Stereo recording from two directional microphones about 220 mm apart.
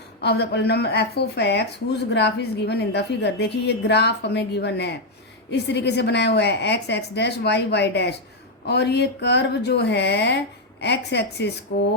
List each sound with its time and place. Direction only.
0.2 s a woman's voice: 50° left (ahead or behind)